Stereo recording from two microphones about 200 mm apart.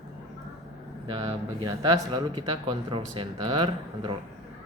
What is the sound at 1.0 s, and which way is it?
A man's voice, 25° right (ahead or behind).